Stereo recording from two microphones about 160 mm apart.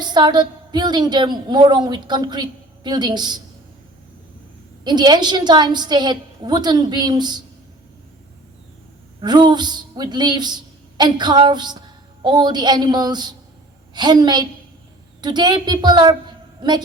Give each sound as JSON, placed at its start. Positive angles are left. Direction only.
{"t": 0.0, "sound": "a woman's voice", "side_deg": -25}
{"t": 4.8, "sound": "a woman's voice", "side_deg": -25}
{"t": 9.2, "sound": "a woman's voice", "side_deg": -25}